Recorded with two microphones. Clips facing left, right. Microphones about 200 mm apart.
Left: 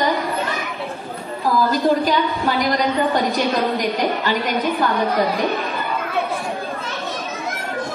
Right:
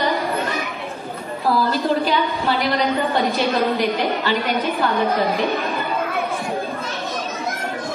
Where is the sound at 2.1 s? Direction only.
45° left (ahead or behind).